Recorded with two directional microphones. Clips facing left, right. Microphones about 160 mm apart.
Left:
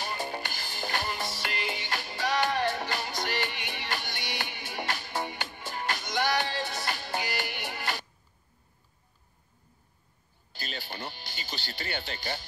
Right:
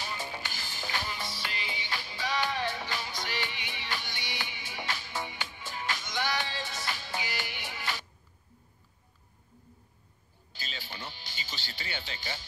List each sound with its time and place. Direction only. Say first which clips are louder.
0.0 s music: left 4 dB; 55° left (ahead or behind)
10.5 s music: left 4 dB; 55° left (ahead or behind)